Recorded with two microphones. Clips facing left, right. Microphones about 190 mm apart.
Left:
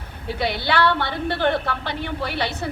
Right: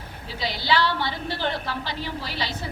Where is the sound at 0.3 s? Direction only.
60° left (ahead or behind).